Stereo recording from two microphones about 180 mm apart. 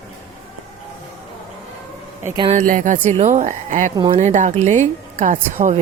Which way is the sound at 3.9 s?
25° right (ahead or behind).